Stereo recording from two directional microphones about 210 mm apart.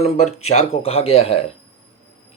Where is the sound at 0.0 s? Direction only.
30° left (ahead or behind).